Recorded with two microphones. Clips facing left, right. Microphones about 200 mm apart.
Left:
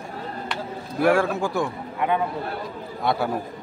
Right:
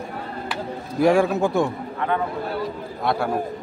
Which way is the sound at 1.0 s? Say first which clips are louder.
Right 3 dB; 15° right (ahead or behind).